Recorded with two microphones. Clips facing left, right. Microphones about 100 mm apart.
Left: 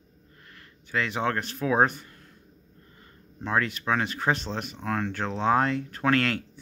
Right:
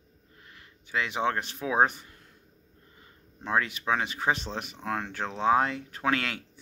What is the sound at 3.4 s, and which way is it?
Speech, 10° right (ahead or behind).